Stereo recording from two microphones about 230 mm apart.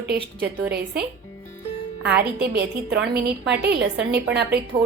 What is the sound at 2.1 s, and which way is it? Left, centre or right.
A woman's voice, right.